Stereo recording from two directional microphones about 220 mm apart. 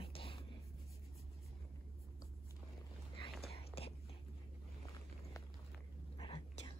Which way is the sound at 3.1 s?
25° left (ahead or behind).